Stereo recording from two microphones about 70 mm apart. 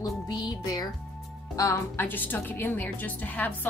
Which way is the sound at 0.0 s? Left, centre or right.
Left.